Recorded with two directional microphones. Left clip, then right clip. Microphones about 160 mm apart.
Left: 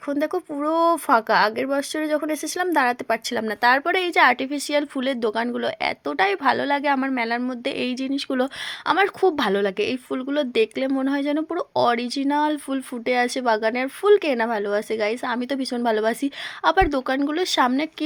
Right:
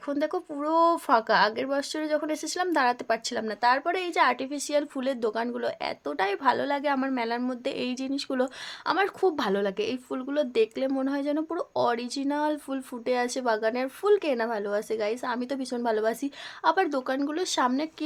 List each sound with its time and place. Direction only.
0.1 s a woman's voice: 20° left (ahead or behind)
3.7 s a woman's voice: 40° left (ahead or behind)